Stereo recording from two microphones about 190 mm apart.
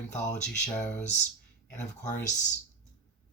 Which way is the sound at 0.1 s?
40° left (ahead or behind).